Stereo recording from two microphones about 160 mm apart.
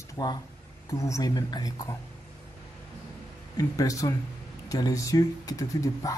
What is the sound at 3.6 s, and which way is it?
Speech, 20° left (ahead or behind).